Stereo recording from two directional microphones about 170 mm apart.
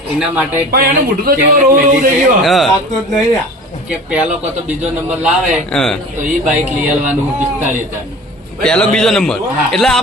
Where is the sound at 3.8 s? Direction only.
5° right (ahead or behind).